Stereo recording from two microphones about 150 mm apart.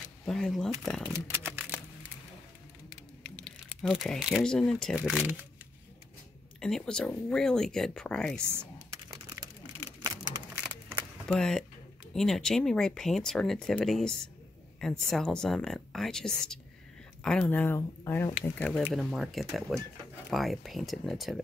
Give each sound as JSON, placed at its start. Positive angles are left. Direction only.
{"t": 0.2, "sound": "speech", "side_deg": 5}
{"t": 1.1, "sound": "a sound", "side_deg": -15}
{"t": 2.9, "sound": "crumpling", "side_deg": 5}
{"t": 5.0, "sound": "speech", "side_deg": -5}
{"t": 6.6, "sound": "speech", "side_deg": 5}
{"t": 8.4, "sound": "speech", "side_deg": -15}
{"t": 10.0, "sound": "a sound", "side_deg": -20}
{"t": 11.2, "sound": "speech", "side_deg": 5}
{"t": 18.8, "sound": "speech", "side_deg": -5}